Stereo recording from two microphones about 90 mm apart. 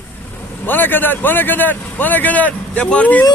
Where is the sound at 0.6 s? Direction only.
20° left (ahead or behind).